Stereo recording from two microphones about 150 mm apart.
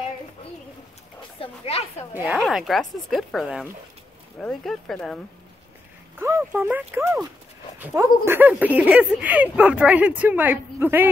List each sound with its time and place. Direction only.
1.4 s speech: 40° left (ahead or behind)
2.2 s speech: centre (ahead or behind)
6.1 s speech: 15° right (ahead or behind)